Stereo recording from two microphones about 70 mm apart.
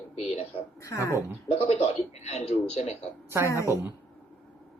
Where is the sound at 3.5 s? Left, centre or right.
Left.